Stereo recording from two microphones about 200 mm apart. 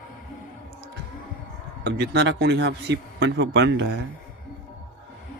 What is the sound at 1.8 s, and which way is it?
A man's voice, 55° right (ahead or behind).